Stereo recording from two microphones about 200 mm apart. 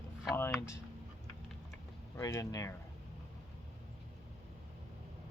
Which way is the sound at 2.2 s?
15° left (ahead or behind).